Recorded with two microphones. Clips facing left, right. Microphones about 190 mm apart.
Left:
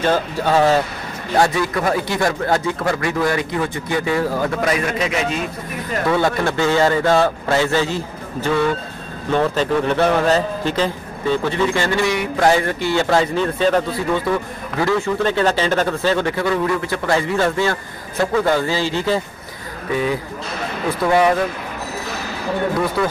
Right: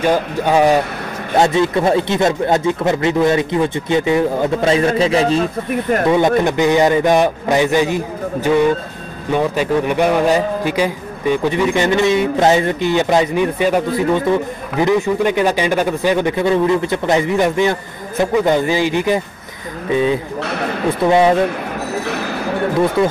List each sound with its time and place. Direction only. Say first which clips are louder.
0.0 s a man's voice: right 3 dB; 15° right (ahead or behind); by 5.5 s 30° right (ahead or behind)
6.0 s a man's voice: right 3 dB; 20° right (ahead or behind)
23.0 s speech: right 5 dB; 20° right (ahead or behind)